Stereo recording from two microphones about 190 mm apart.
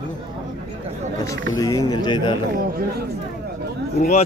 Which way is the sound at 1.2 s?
20° left (ahead or behind).